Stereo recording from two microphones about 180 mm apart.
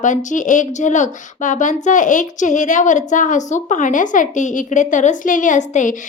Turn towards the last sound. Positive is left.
turn(degrees=45)  # may be behind; listen again after turning